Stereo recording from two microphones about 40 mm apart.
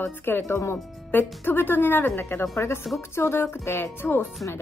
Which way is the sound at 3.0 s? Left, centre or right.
Left.